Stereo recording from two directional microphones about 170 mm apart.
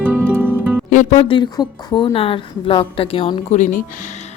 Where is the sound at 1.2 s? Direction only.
30° left (ahead or behind).